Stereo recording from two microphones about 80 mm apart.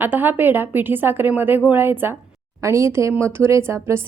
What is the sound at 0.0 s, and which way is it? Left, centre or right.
A woman's voice, right.